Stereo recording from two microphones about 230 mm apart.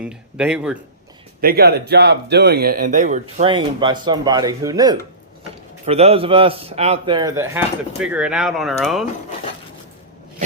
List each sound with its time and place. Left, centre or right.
0.0 s speech: centre
1.4 s speech: right; by 4.9 s centre
5.8 s a man's voice: right; by 9.0 s centre